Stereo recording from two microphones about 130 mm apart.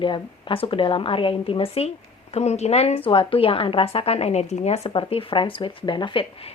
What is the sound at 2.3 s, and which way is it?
Speech, 55° left (ahead or behind).